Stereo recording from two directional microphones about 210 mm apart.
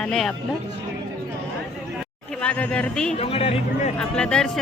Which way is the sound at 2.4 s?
5° left (ahead or behind).